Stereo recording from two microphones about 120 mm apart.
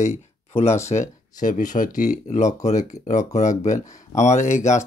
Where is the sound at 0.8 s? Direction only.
85° left.